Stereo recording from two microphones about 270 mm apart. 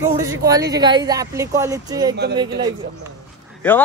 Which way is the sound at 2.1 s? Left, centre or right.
Right.